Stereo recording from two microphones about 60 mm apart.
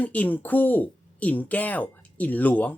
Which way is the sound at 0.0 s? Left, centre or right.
Left.